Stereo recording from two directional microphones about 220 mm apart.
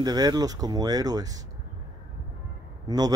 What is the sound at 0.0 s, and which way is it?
A man's voice, 15° right (ahead or behind).